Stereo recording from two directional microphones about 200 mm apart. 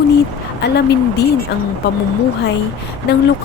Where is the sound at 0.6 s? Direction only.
55° left (ahead or behind).